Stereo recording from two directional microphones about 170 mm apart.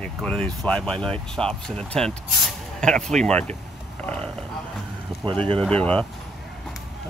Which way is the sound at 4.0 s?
5° left (ahead or behind).